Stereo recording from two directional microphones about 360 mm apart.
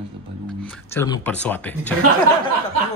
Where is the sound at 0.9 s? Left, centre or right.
Centre.